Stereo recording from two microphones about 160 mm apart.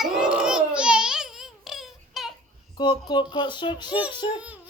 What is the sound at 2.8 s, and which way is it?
Speech, 30° left (ahead or behind).